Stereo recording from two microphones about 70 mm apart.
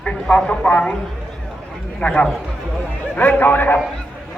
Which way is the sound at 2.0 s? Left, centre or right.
Centre.